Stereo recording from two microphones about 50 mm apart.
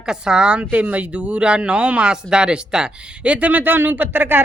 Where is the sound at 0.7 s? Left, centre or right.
Right.